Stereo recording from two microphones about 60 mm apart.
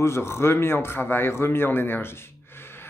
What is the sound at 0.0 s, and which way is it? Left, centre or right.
A man's voice, left.